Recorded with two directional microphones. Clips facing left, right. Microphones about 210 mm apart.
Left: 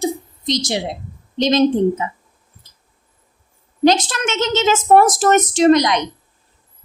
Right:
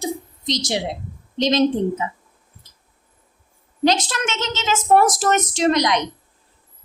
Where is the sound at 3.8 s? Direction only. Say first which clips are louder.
Left 4 dB; 50° left (ahead or behind).